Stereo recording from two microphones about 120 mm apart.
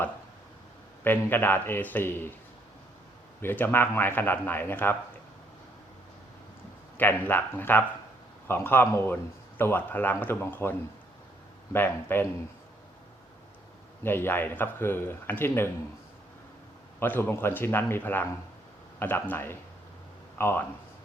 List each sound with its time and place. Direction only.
1.0 s speech: 15° left (ahead or behind)
3.4 s speech: 15° left (ahead or behind)
6.9 s a man's voice: 15° left (ahead or behind)
14.0 s speech: 20° left (ahead or behind)
17.0 s a man's voice: 20° left (ahead or behind)